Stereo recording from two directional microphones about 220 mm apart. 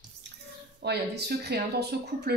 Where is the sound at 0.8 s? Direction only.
50° right (ahead or behind).